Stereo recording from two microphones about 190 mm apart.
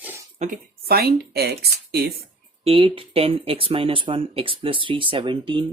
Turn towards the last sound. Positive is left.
turn(degrees=-25)  # may be behind; listen again after turning